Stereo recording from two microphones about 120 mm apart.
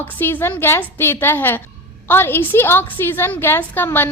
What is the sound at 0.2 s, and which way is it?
A woman's voice, 20° left (ahead or behind).